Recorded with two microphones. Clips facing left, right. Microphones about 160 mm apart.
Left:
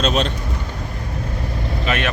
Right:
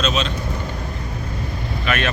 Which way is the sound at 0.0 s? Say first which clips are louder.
Left 2 dB; 55° left (ahead or behind).